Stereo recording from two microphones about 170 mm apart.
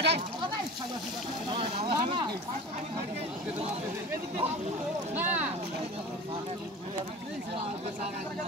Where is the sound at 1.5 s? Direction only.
40° right (ahead or behind).